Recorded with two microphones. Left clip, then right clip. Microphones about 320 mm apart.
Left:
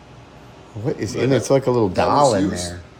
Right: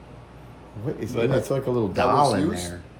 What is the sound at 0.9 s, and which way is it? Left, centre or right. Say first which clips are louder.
Speech: left 4 dB; centre.